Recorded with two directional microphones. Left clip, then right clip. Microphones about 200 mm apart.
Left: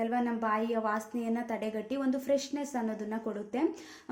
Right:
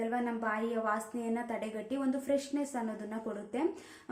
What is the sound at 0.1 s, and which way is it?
A woman's voice, 35° left (ahead or behind).